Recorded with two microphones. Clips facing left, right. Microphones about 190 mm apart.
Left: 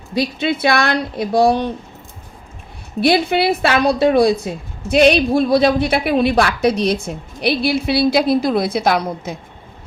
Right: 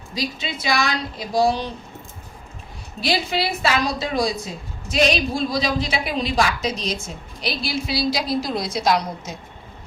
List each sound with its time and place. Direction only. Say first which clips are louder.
0.1 s a woman's voice: left 9 dB; 60° left (ahead or behind)
3.0 s a woman's voice: left 8 dB; 60° left (ahead or behind)